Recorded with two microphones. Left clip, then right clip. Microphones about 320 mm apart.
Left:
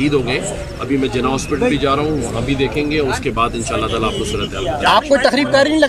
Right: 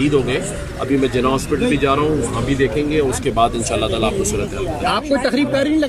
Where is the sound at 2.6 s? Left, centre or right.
Centre.